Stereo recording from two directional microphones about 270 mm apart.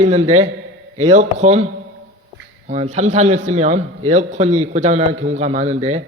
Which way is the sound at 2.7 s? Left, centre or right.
Right.